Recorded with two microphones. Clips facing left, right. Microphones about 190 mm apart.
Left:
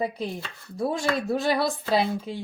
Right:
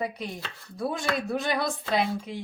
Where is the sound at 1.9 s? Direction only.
30° left (ahead or behind).